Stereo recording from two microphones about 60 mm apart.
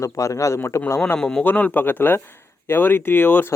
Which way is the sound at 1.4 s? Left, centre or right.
Left.